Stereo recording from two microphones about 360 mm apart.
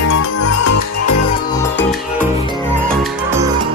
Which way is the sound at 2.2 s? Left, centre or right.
Centre.